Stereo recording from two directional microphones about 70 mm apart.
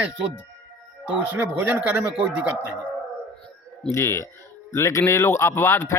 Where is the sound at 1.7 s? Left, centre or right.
Right.